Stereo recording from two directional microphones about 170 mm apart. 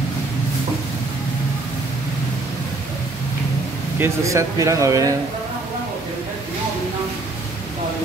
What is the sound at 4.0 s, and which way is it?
Speech, 20° right (ahead or behind).